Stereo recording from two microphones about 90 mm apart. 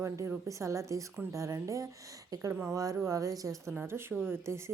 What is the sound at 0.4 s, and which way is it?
A woman's voice, 35° right (ahead or behind).